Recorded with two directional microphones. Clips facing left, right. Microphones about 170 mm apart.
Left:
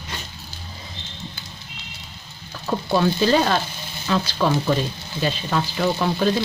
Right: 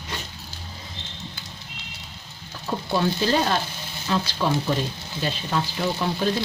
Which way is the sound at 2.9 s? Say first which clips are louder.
Left 4 dB; 90° left.